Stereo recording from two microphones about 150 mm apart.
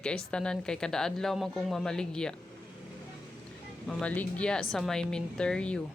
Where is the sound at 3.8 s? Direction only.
10° left (ahead or behind).